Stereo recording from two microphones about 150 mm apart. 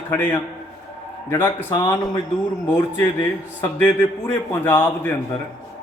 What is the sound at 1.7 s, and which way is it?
Speech, 25° left (ahead or behind).